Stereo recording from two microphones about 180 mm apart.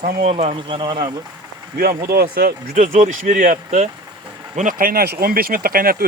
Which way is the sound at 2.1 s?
60° right (ahead or behind).